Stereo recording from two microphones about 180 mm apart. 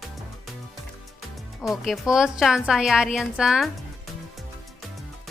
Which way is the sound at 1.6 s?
Centre (ahead or behind).